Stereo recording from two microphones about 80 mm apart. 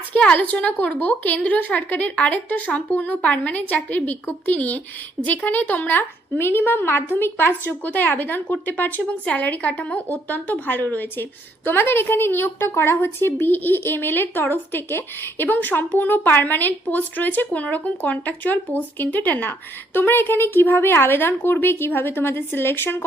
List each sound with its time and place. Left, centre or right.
0.1 s a child's voice: centre